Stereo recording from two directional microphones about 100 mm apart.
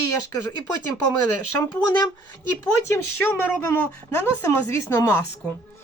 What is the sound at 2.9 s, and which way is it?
A woman's voice, 20° left (ahead or behind).